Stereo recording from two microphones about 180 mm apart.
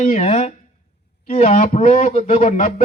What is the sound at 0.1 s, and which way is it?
Speech, 40° left (ahead or behind).